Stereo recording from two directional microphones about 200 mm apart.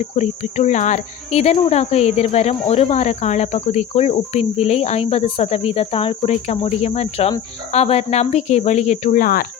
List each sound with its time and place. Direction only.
0.0 s speech: 35° left (ahead or behind)